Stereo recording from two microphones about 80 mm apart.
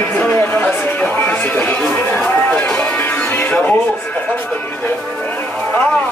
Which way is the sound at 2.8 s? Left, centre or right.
Left.